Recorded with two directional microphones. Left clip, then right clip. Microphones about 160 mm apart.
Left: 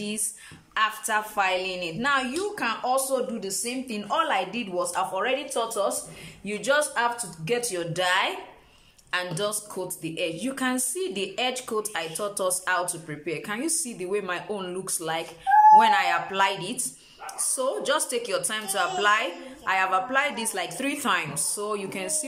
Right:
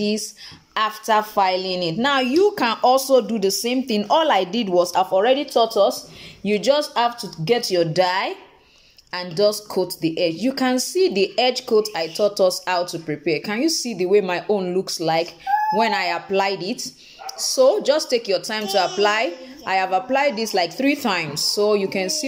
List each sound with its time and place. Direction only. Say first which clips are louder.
0.7 s a woman's voice: right 6 dB; 30° right (ahead or behind)